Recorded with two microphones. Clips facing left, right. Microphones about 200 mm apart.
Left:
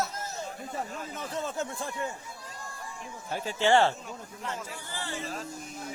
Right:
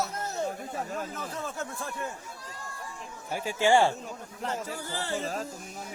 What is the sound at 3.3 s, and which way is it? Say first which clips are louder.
Speech: right 1 dB; 10° right (ahead or behind).